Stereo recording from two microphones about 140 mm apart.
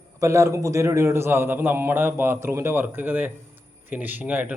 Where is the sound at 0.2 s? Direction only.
20° right (ahead or behind).